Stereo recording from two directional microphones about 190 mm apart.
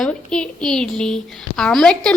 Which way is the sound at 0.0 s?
5° left (ahead or behind).